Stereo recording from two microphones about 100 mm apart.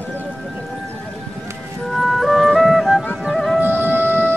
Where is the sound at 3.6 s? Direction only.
20° right (ahead or behind).